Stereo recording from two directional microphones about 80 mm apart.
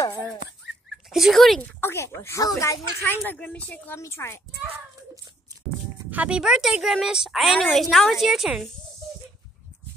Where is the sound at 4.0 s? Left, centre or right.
Left.